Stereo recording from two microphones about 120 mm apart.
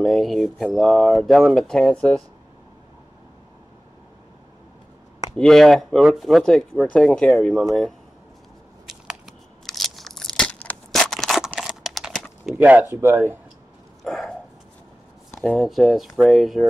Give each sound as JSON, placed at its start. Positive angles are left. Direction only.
{"t": 0.0, "sound": "speech", "side_deg": 0}
{"t": 5.3, "sound": "speech", "side_deg": 5}
{"t": 8.8, "sound": "crunch", "side_deg": -5}
{"t": 10.9, "sound": "a sound", "side_deg": 5}
{"t": 12.5, "sound": "speech", "side_deg": -10}
{"t": 14.0, "sound": "a sound", "side_deg": 0}
{"t": 15.4, "sound": "speech", "side_deg": 0}